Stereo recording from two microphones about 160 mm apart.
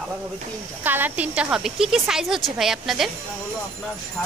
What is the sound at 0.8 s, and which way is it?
Speech, 10° right (ahead or behind).